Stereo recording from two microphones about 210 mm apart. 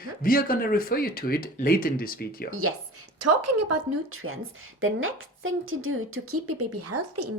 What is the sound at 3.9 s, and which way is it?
A woman's voice, 90° right.